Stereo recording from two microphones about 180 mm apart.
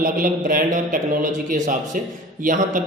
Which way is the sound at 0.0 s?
50° right (ahead or behind).